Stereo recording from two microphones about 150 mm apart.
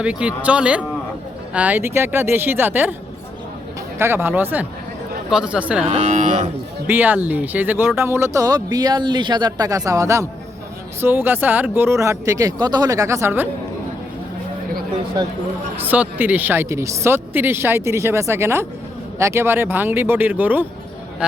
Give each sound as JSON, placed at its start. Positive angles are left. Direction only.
{"t": 0.0, "sound": "speech", "side_deg": -5}
{"t": 3.9, "sound": "speech", "side_deg": -15}
{"t": 5.8, "sound": "speech", "side_deg": -45}
{"t": 6.8, "sound": "a man's voice", "side_deg": -10}
{"t": 15.9, "sound": "speech", "side_deg": -10}